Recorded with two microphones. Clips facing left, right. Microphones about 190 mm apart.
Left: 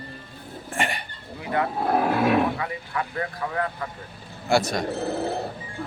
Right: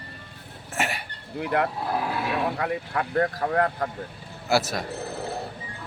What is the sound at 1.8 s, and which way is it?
Speech, 60° left (ahead or behind).